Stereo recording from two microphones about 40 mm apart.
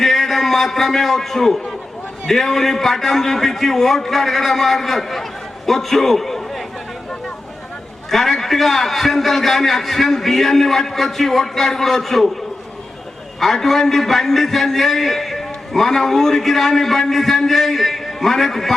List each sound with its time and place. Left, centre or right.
0.0 s a man's voice: centre
8.1 s a man's voice: centre
13.4 s a man's voice: centre